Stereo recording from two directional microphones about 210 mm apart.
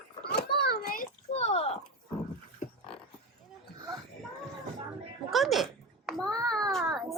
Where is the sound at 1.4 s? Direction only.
30° left (ahead or behind).